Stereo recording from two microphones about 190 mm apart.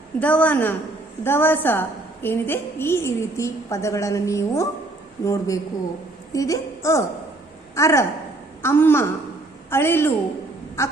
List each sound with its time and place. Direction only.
0.2 s a woman's voice: 5° left (ahead or behind)